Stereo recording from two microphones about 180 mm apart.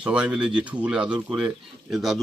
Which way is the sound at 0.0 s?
5° right (ahead or behind).